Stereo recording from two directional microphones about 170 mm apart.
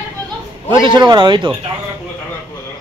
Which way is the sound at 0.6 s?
30° right (ahead or behind).